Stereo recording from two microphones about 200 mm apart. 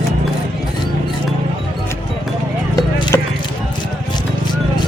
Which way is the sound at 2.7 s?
20° left (ahead or behind).